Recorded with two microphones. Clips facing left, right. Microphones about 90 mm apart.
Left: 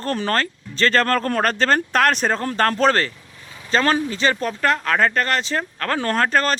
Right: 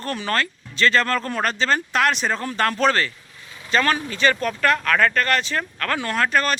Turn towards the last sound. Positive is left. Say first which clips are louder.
# left 2 dB
turn(degrees=35)  # may be behind; listen again after turning